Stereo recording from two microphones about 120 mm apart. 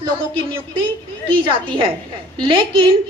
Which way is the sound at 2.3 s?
40° right (ahead or behind).